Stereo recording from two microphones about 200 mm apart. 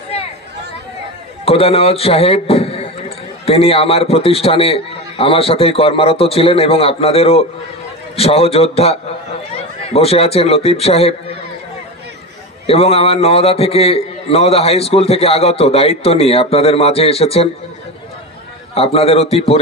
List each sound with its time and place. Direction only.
1.4 s a man's voice: 30° left (ahead or behind)
12.6 s a man's voice: 30° left (ahead or behind)
18.8 s a man's voice: 30° left (ahead or behind)